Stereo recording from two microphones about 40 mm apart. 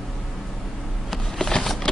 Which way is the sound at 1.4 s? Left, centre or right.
Centre.